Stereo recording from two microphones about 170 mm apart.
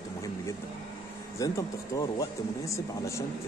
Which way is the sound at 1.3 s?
20° left (ahead or behind).